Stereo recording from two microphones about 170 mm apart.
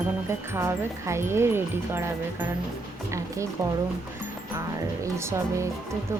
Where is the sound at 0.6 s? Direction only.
15° right (ahead or behind).